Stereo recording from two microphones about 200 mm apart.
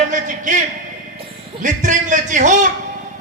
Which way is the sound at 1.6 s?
40° right (ahead or behind).